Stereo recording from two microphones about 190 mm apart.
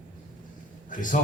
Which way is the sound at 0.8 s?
45° left (ahead or behind).